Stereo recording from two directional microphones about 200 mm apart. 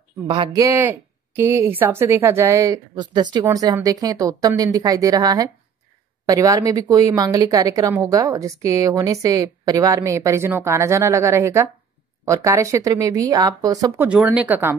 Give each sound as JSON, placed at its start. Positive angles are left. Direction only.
{"t": 0.3, "sound": "speech", "side_deg": -20}
{"t": 14.0, "sound": "speech", "side_deg": -5}